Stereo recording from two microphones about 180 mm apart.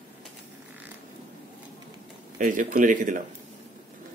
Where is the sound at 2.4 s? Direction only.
50° right (ahead or behind).